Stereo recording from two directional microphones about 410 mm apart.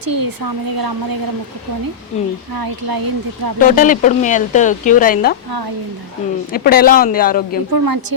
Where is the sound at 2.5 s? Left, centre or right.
Right.